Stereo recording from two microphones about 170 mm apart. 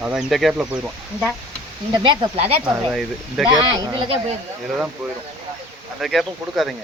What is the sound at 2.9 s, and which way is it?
Speech, centre (ahead or behind).